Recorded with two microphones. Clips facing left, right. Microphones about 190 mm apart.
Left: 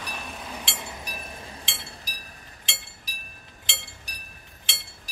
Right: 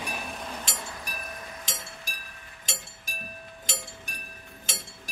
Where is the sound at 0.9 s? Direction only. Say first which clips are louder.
Left 1 dB; 25° left (ahead or behind).